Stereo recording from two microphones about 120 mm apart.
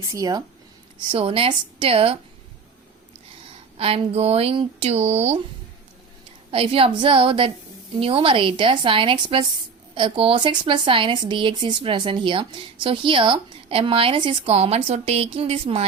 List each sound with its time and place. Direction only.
0.1 s speech: 30° right (ahead or behind)
1.1 s speech: 55° right (ahead or behind)
3.8 s speech: 55° right (ahead or behind)
6.5 s speech: 50° right (ahead or behind)